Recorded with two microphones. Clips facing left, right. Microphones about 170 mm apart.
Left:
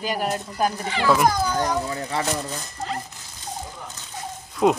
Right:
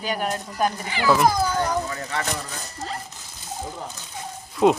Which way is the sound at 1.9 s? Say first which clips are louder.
Left 2 dB; 30° left (ahead or behind).